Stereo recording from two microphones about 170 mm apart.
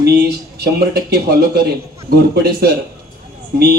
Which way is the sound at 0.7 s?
65° right (ahead or behind).